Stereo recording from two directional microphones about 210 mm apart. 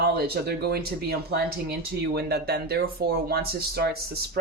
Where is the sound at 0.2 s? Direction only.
50° right (ahead or behind).